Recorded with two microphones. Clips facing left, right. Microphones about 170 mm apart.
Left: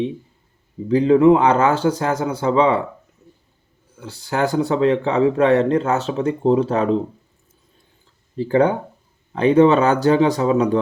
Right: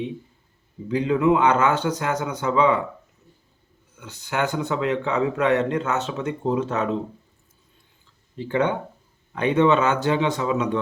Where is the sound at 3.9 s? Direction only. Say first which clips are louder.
Left 4 dB; 30° left (ahead or behind).